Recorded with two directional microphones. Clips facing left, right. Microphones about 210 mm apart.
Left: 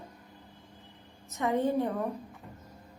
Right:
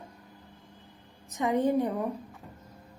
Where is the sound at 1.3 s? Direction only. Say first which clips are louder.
Right 2 dB; 15° right (ahead or behind).